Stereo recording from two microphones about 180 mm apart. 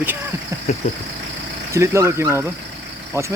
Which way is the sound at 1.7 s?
15° right (ahead or behind).